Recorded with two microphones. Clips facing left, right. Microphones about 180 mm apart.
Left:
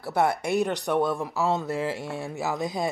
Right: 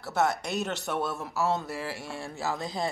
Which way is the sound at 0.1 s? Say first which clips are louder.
Left 4 dB; 10° left (ahead or behind).